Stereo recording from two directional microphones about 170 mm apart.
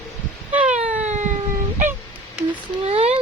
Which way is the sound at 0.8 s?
45° right (ahead or behind).